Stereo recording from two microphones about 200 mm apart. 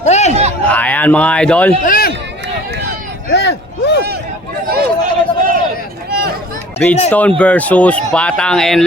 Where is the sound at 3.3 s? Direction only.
55° left (ahead or behind).